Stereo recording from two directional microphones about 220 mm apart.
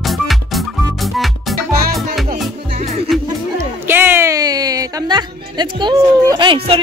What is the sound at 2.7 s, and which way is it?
Music, 30° right (ahead or behind).